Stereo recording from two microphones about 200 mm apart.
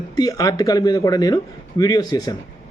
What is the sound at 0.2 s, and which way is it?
Speech, 20° left (ahead or behind).